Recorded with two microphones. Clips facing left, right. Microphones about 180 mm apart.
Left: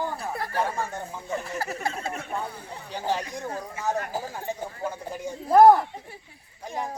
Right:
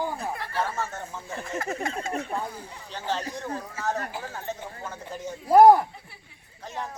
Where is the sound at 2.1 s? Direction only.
35° right (ahead or behind).